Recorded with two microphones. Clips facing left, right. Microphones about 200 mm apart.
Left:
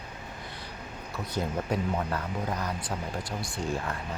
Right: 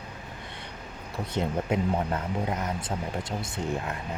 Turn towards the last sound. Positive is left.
turn(degrees=-20)  # may be behind; listen again after turning